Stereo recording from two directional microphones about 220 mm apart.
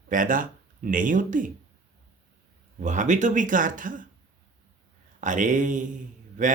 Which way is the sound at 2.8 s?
35° right (ahead or behind).